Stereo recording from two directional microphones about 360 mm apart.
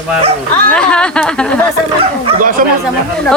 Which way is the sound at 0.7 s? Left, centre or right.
Centre.